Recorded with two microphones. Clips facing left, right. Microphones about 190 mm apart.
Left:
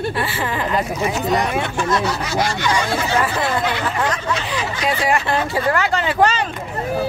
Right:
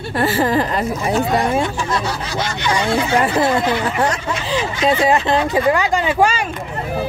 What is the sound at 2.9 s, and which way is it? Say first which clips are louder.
Speech: right 3 dB; 30° right (ahead or behind).